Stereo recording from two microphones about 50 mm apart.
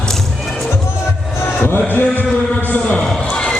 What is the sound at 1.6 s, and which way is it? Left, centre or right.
Chant, left.